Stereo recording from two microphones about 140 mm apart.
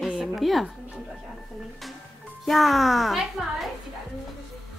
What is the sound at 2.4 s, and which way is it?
Speech, centre (ahead or behind).